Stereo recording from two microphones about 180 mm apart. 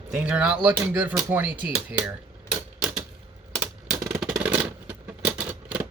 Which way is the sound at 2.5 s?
5° right (ahead or behind).